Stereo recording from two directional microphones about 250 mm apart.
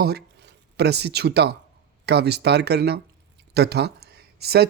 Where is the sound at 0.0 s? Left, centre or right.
Right.